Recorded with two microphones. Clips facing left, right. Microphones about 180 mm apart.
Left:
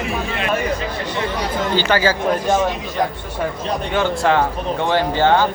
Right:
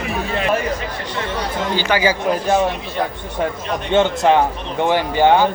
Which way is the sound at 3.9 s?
20° right (ahead or behind).